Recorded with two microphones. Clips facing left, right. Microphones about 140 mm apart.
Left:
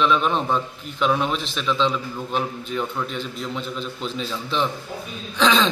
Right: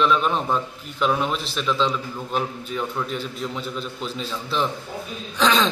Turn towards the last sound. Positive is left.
turn(degrees=-5)  # may be behind; listen again after turning